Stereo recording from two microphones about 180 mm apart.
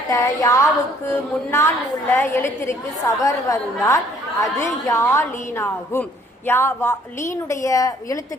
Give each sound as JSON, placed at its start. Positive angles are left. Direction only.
{"t": 0.1, "sound": "a woman's voice", "side_deg": 20}